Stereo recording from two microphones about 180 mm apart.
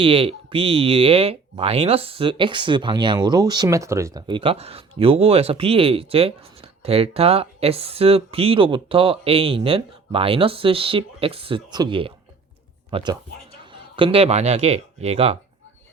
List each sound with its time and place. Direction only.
0.0 s speech: 30° right (ahead or behind)